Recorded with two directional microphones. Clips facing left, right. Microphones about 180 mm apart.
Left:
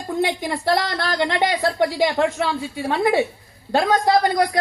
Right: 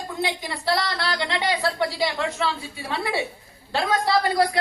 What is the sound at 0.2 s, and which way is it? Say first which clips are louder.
A woman's voice: left 6 dB; 50° left (ahead or behind).